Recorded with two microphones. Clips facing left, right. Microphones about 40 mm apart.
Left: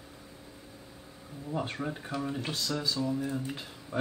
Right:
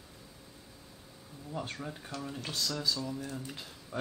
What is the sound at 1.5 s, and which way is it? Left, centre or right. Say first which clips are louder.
Speech: left 5 dB; centre.